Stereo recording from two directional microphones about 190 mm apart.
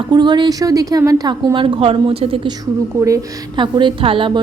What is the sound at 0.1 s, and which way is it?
A woman's voice, 25° right (ahead or behind).